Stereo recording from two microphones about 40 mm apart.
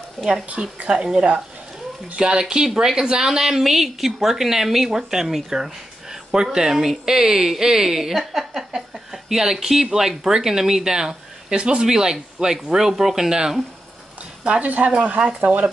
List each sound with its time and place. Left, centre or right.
0.5 s a woman's voice: right
0.8 s speech: centre
14.6 s a woman's voice: right